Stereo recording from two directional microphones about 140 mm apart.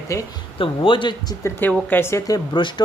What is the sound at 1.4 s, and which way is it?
Speech, 10° left (ahead or behind).